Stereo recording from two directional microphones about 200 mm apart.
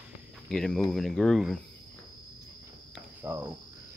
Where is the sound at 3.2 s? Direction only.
10° right (ahead or behind).